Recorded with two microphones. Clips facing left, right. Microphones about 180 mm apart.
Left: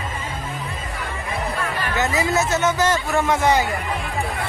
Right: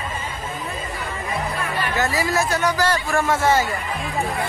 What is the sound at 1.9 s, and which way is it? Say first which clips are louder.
Speech: left 1 dB; 20° left (ahead or behind).